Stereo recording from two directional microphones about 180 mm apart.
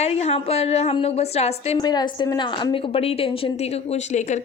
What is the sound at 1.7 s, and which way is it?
A woman's voice, 25° left (ahead or behind).